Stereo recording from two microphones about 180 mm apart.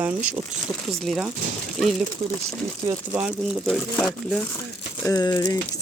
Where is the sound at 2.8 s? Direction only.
10° right (ahead or behind).